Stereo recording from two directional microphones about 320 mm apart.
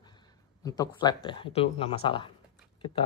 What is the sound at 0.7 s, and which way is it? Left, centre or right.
Speech, centre.